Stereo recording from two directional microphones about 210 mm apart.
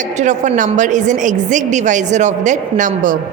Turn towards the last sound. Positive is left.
turn(degrees=-40)  # may be behind; listen again after turning